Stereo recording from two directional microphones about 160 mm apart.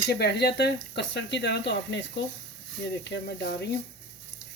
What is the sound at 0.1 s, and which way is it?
Speech, 90° left.